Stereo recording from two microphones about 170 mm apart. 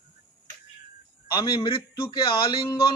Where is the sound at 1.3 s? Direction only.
30° left (ahead or behind).